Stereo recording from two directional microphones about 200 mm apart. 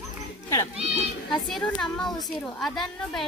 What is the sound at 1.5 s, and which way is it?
A woman's voice, centre (ahead or behind).